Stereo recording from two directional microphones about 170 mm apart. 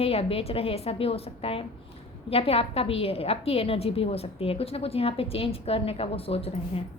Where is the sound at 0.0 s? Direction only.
35° left (ahead or behind).